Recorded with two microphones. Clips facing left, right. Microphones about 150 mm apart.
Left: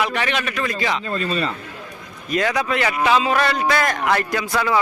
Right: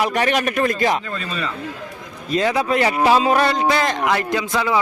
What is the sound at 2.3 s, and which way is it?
A man's voice, 25° right (ahead or behind).